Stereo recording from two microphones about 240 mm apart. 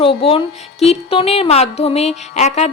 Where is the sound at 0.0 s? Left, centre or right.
Left.